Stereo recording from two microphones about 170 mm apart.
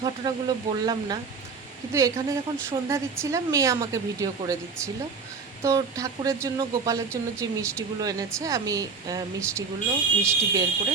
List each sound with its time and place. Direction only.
0.0 s speech: 25° right (ahead or behind)
5.6 s speech: 20° right (ahead or behind)